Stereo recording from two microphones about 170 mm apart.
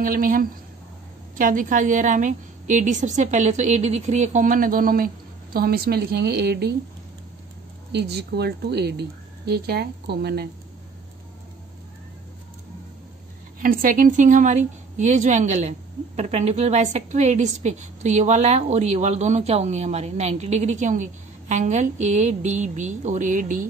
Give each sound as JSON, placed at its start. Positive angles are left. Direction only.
{"t": 0.0, "sound": "a woman's voice", "side_deg": -55}
{"t": 7.9, "sound": "speech", "side_deg": -75}
{"t": 13.6, "sound": "a woman's voice", "side_deg": -55}